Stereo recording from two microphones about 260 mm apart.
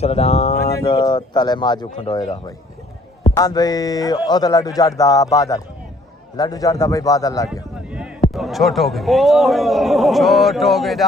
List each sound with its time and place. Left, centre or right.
0.0 s speech: left
7.9 s a man's voice: centre